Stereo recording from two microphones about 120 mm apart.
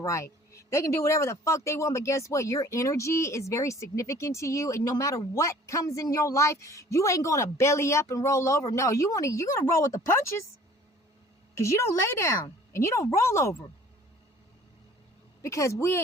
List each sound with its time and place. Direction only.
0.0 s speech: 25° left (ahead or behind)
11.5 s speech: 25° left (ahead or behind)
15.4 s speech: 25° left (ahead or behind)